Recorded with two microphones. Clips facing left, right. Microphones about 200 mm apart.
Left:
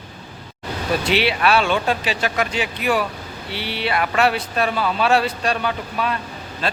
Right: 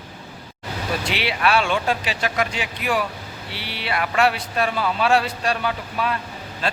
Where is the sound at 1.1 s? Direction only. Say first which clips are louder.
Left 2 dB; 25° left (ahead or behind).